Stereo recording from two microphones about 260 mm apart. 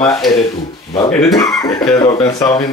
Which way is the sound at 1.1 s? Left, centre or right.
Centre.